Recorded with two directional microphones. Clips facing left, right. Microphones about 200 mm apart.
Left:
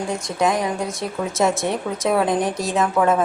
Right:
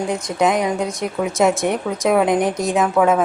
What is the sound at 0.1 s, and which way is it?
A woman's voice, 20° right (ahead or behind).